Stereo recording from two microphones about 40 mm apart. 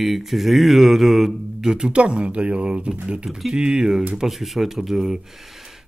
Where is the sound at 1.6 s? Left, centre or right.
Right.